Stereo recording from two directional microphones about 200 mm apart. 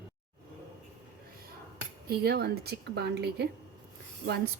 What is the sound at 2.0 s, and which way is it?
A woman's voice, 55° right (ahead or behind).